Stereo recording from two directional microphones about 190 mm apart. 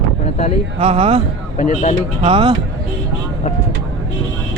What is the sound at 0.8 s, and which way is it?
Speech, 30° right (ahead or behind).